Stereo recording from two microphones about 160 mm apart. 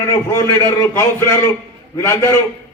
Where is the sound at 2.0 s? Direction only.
15° left (ahead or behind).